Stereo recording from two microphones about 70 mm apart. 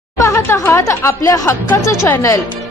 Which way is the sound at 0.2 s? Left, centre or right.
Left.